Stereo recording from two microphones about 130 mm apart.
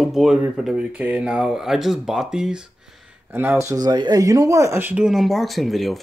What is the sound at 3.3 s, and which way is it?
Speech, 20° right (ahead or behind).